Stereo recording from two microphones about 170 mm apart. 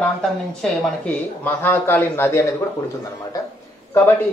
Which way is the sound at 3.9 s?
10° left (ahead or behind).